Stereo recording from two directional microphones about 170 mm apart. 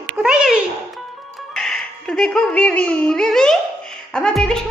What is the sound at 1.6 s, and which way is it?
A child's voice, centre (ahead or behind).